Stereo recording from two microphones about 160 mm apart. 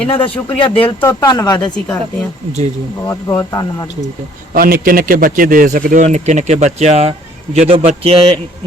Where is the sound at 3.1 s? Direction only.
20° left (ahead or behind).